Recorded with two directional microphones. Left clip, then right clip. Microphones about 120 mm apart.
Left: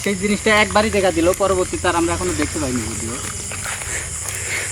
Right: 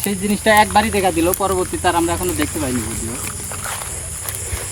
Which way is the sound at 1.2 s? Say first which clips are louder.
Left 1 dB; 35° right (ahead or behind).